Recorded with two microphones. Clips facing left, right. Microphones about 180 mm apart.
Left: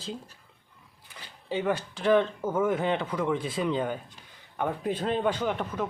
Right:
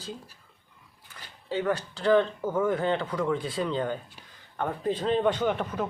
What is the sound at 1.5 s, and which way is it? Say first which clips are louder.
Speech: even; 15° left (ahead or behind).